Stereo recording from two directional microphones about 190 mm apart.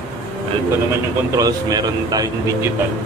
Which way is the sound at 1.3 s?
20° right (ahead or behind).